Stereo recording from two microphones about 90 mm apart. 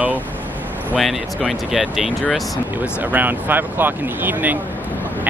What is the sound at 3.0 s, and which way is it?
Speech, 20° right (ahead or behind).